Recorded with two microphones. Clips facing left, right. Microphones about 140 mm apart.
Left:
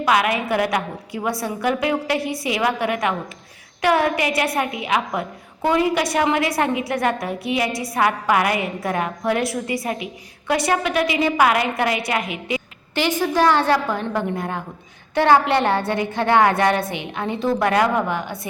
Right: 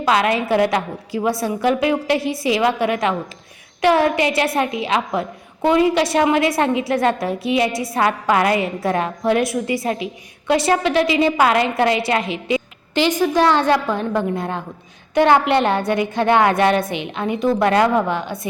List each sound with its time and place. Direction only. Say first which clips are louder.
0.0 s a woman's voice: right 2 dB; 30° right (ahead or behind)